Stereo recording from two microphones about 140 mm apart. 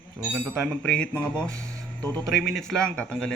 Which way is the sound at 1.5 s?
25° right (ahead or behind).